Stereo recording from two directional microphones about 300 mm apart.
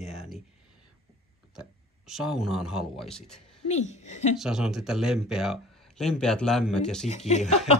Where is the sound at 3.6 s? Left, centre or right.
Left.